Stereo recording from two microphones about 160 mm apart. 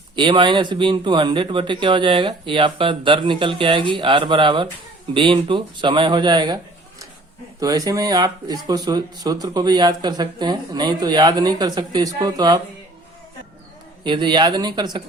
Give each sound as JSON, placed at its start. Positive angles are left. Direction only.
{"t": 0.2, "sound": "a man's voice", "side_deg": -30}
{"t": 7.6, "sound": "speech", "side_deg": -20}
{"t": 14.0, "sound": "speech", "side_deg": -30}